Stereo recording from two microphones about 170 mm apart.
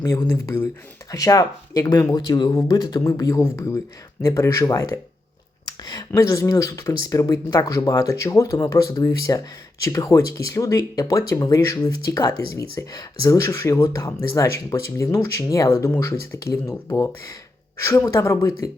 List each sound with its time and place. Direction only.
0.0 s speech: 20° left (ahead or behind)